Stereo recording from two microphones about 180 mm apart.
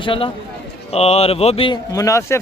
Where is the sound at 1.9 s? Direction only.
15° left (ahead or behind).